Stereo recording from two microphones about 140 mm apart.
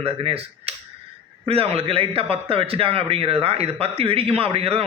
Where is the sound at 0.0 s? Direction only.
45° right (ahead or behind).